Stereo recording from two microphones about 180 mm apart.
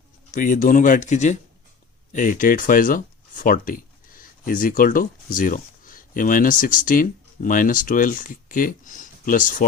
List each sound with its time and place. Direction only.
0.3 s speech: 45° left (ahead or behind)